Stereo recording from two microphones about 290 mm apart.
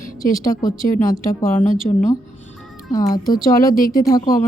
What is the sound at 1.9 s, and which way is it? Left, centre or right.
Speech, centre.